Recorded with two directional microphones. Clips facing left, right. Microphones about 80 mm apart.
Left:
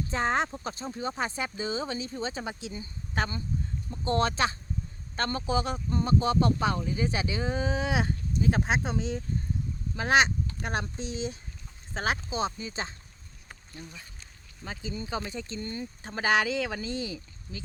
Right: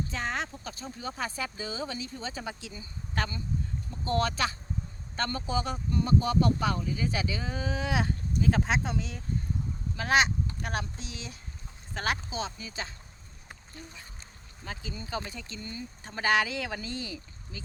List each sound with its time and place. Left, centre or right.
0.1 s speech: left
14.6 s speech: left